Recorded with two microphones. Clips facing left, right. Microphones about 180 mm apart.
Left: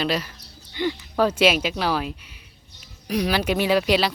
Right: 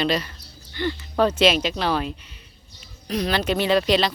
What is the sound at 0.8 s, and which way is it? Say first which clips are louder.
Speech: even; 15° left (ahead or behind).